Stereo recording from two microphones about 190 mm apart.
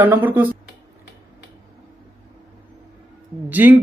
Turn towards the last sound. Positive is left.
turn(degrees=-10)  # may be behind; listen again after turning